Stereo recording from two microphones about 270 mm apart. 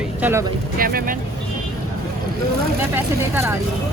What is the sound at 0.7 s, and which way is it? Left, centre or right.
Speech, right.